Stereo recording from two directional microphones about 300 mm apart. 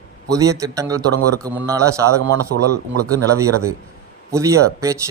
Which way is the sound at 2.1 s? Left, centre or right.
Right.